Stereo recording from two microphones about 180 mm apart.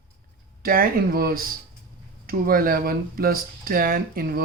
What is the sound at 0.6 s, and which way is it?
Speech, 55° right (ahead or behind).